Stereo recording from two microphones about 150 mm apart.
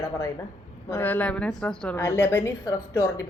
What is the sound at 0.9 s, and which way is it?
A woman's voice, 10° left (ahead or behind).